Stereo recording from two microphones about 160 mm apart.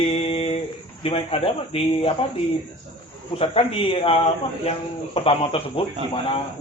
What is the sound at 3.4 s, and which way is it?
A man's voice, 35° left (ahead or behind).